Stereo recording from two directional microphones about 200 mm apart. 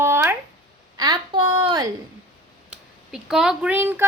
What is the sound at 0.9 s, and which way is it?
Speech, 20° right (ahead or behind).